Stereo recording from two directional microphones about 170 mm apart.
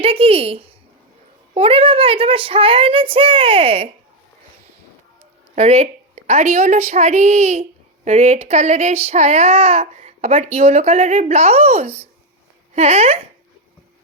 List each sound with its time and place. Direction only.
0.0 s speech: 35° right (ahead or behind)
5.5 s speech: 40° right (ahead or behind)